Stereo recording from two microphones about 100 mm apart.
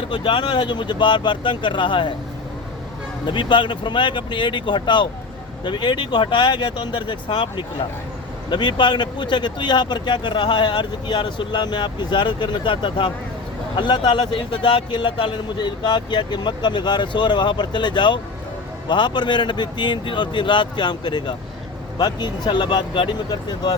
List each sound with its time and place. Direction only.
0.1 s speech: 55° left (ahead or behind)
3.2 s speech: 55° left (ahead or behind)